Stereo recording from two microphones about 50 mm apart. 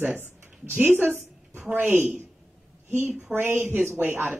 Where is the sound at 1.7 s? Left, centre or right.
Right.